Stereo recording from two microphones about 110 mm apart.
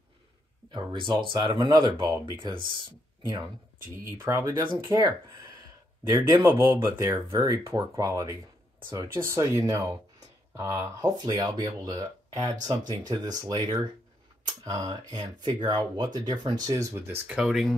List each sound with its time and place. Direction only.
0.7 s speech: 45° right (ahead or behind)
4.2 s speech: 20° right (ahead or behind)
4.8 s speech: 35° right (ahead or behind)
6.0 s speech: 25° right (ahead or behind)
11.1 s speech: 40° right (ahead or behind)
17.3 s speech: 5° right (ahead or behind)